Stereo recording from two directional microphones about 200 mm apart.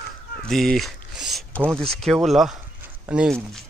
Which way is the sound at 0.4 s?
Centre (ahead or behind).